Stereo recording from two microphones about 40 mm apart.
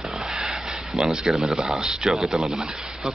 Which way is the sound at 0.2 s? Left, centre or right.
Centre.